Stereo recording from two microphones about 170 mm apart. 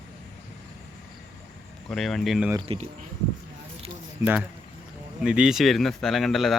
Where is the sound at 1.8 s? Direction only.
Centre (ahead or behind).